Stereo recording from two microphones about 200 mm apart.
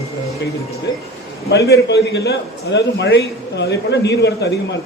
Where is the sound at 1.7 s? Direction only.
55° left (ahead or behind).